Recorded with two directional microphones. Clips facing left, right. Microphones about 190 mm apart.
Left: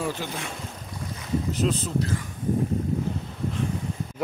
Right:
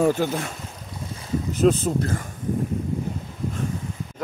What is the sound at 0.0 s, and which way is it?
Speech, 50° right (ahead or behind).